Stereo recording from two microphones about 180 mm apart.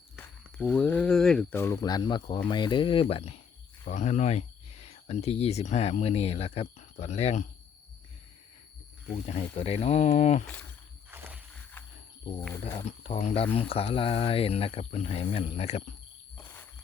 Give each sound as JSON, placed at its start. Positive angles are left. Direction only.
{"t": 0.2, "sound": "speech", "side_deg": 5}
{"t": 9.1, "sound": "speech", "side_deg": 35}
{"t": 10.4, "sound": "speech", "side_deg": 10}
{"t": 11.1, "sound": "a sound", "side_deg": -10}
{"t": 13.0, "sound": "speech", "side_deg": 40}